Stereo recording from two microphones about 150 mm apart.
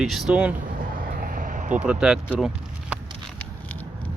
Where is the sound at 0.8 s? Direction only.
70° right (ahead or behind).